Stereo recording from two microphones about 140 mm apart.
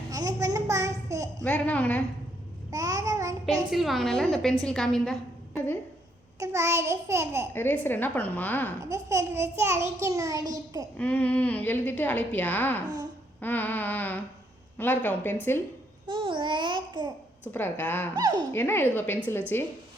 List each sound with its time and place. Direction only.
0.1 s a sound: 25° right (ahead or behind)
1.5 s a woman's voice: 10° left (ahead or behind)
2.6 s child singing: 25° right (ahead or behind)
3.7 s a woman's voice: centre (ahead or behind)
6.4 s a child's voice: 20° right (ahead or behind)
7.5 s a woman's voice: 15° left (ahead or behind)
8.8 s a child's voice: 20° right (ahead or behind)
10.9 s a woman's voice: 10° left (ahead or behind)
16.0 s babbling: 35° right (ahead or behind)
17.5 s a woman's voice: 15° left (ahead or behind)
18.2 s a child's voice: 30° right (ahead or behind)
18.5 s a woman's voice: 15° left (ahead or behind)